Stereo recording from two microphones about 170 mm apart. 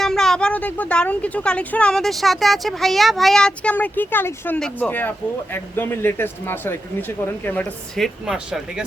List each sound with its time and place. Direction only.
0.0 s a woman's voice: 5° left (ahead or behind)